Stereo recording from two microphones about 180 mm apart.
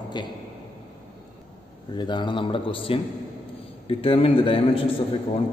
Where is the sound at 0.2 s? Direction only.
25° left (ahead or behind).